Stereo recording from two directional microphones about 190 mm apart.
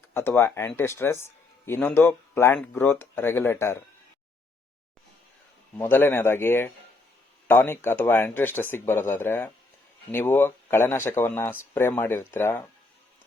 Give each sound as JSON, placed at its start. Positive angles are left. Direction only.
{"t": 0.1, "sound": "speech", "side_deg": 10}
{"t": 5.7, "sound": "speech", "side_deg": 10}